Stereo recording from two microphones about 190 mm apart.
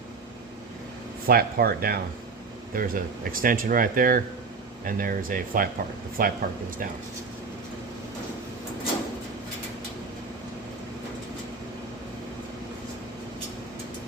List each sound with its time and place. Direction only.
1.3 s speech: 50° right (ahead or behind)